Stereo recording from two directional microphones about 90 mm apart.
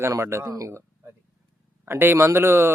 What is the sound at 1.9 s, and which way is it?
Speech, 25° right (ahead or behind).